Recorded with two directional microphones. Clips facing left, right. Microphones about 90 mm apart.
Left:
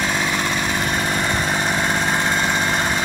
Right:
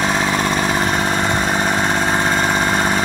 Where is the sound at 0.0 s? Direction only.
35° right (ahead or behind).